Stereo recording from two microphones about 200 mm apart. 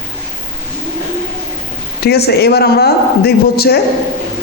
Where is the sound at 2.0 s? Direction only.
55° left (ahead or behind).